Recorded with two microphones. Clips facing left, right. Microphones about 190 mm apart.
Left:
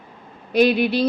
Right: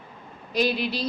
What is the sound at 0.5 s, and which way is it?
Speech, 60° left (ahead or behind).